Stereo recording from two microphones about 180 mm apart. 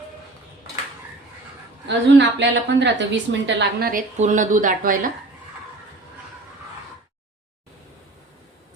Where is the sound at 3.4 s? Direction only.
55° right (ahead or behind).